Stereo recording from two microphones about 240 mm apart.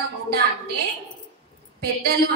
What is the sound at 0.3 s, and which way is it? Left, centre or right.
A woman's voice, right.